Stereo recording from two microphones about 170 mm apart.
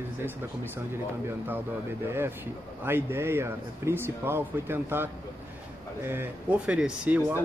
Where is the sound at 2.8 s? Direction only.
15° right (ahead or behind).